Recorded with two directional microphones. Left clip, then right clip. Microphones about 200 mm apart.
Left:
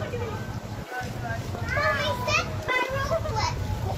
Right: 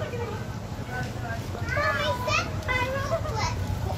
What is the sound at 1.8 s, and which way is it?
Children playing, 55° left (ahead or behind).